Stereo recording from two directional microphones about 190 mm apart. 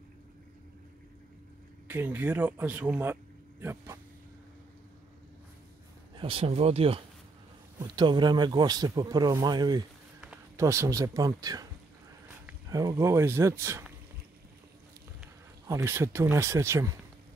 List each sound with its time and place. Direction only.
1.9 s speech: 10° right (ahead or behind)
6.1 s speech: 30° right (ahead or behind); by 13.8 s 15° right (ahead or behind)
15.6 s speech: 15° right (ahead or behind)